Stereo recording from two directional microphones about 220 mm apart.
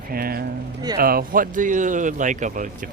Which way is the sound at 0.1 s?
45° right (ahead or behind).